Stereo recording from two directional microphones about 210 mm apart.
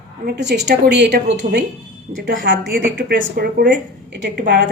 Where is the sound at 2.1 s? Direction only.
35° right (ahead or behind).